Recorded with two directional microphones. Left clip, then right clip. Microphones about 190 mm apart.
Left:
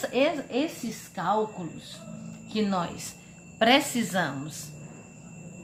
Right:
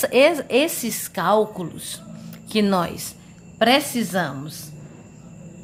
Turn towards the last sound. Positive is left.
turn(degrees=-25)  # may be behind; listen again after turning